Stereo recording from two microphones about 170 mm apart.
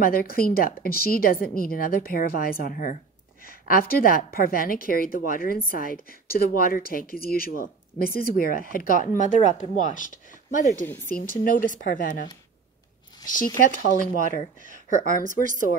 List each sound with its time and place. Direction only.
0.0 s a woman's voice: 60° left (ahead or behind)
13.3 s speech: 50° left (ahead or behind)
15.2 s speech: 50° right (ahead or behind)